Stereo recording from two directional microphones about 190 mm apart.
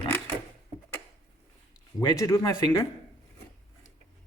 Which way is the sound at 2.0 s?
20° left (ahead or behind).